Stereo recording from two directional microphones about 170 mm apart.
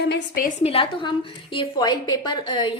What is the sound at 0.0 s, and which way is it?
Speech, 80° left.